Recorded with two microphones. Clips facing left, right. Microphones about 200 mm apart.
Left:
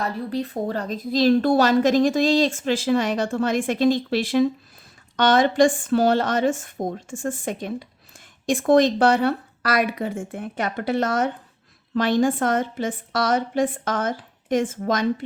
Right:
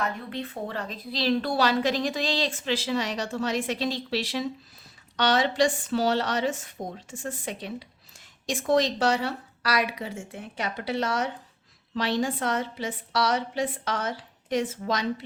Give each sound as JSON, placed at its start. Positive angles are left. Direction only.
{"t": 0.0, "sound": "speech", "side_deg": 35}